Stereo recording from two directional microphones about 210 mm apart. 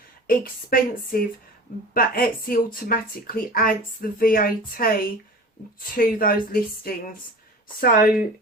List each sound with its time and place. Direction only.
0.3 s speech: 45° left (ahead or behind)